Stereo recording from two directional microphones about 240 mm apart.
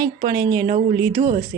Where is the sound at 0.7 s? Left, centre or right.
Right.